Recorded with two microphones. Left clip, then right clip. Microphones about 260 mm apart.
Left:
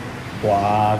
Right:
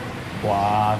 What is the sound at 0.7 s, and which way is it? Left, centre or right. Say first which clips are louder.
Speech: left 2 dB; centre.